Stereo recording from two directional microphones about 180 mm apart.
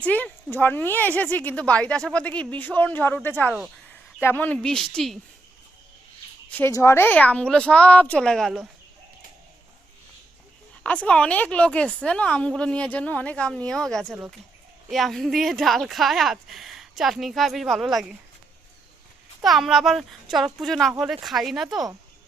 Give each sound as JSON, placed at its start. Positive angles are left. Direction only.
{"t": 0.0, "sound": "a woman's voice", "side_deg": 10}
{"t": 6.5, "sound": "a woman's voice", "side_deg": 15}
{"t": 10.8, "sound": "a woman's voice", "side_deg": 5}
{"t": 14.0, "sound": "speech", "side_deg": -10}
{"t": 19.4, "sound": "speech", "side_deg": 0}